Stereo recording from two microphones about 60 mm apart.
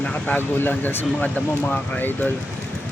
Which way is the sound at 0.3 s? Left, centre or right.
Left.